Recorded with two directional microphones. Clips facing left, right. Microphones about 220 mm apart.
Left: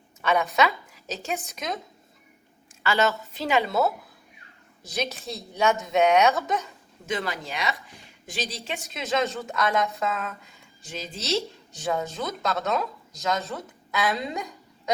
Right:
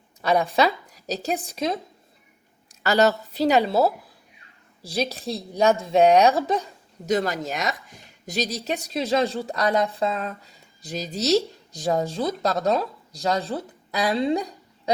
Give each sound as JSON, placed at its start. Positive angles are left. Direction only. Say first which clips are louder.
{"t": 0.2, "sound": "speech", "louder": "right 3 dB", "side_deg": -35}
{"t": 2.8, "sound": "a woman's voice", "louder": "right 5 dB", "side_deg": -40}